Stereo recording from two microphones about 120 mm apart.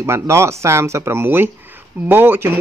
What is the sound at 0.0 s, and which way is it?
Speech, 25° right (ahead or behind).